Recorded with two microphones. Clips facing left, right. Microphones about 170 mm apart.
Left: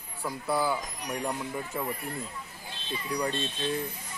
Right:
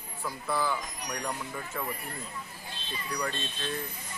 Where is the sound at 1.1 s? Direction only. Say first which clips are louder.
Left 4 dB; 20° left (ahead or behind).